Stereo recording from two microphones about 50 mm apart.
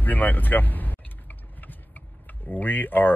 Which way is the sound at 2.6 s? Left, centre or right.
Left.